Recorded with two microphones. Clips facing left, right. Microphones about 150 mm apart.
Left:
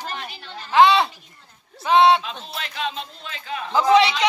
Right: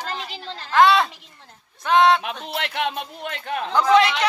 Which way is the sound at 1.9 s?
Centre (ahead or behind).